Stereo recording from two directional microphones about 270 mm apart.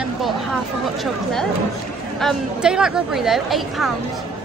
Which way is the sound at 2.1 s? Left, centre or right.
Centre.